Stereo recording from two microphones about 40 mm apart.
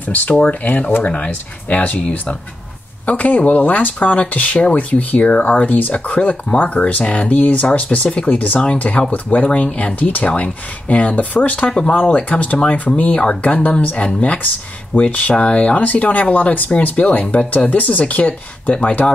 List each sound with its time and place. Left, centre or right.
0.0 s speech: left
16.7 s speech: left